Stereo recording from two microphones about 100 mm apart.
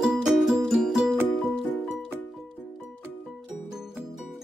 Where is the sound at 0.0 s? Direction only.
5° right (ahead or behind).